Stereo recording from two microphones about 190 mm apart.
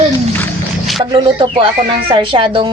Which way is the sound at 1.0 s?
25° right (ahead or behind).